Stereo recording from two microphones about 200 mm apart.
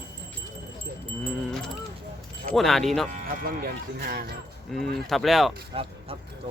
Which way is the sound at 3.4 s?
45° right (ahead or behind).